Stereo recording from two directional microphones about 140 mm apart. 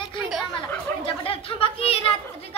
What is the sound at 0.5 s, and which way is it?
Chatter, 40° left (ahead or behind).